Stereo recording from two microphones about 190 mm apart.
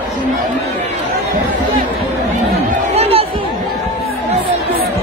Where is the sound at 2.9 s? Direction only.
30° right (ahead or behind).